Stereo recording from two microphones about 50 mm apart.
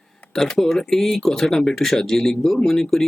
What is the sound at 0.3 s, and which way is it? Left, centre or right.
Speech, centre.